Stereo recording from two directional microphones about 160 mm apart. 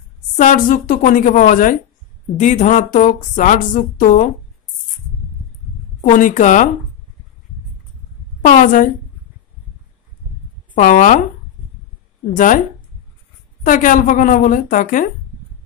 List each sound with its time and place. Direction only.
0.4 s a woman's voice: 55° left (ahead or behind)
5.9 s speech: 50° left (ahead or behind)
8.4 s a woman's voice: 55° left (ahead or behind)
10.7 s speech: 55° left (ahead or behind)
13.7 s a woman's voice: 55° left (ahead or behind)